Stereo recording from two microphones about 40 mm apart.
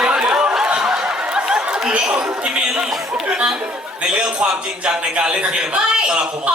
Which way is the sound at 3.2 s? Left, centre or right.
Right.